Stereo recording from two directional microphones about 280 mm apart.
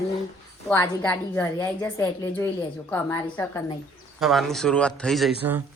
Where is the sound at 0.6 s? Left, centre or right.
Centre.